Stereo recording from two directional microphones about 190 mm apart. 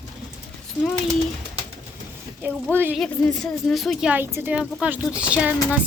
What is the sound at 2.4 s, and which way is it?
Speech, 10° right (ahead or behind).